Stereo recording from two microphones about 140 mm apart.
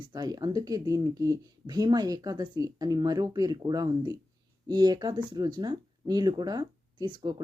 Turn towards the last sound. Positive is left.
turn(degrees=-30)  # may be behind; listen again after turning